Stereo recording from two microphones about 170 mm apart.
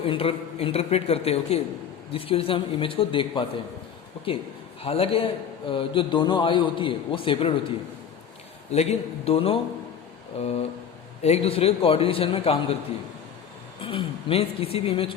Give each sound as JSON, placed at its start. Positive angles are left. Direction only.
{"t": 0.0, "sound": "a woman's voice", "side_deg": 35}
{"t": 4.8, "sound": "a woman's voice", "side_deg": 35}
{"t": 8.7, "sound": "a woman's voice", "side_deg": 40}
{"t": 13.8, "sound": "speech", "side_deg": 35}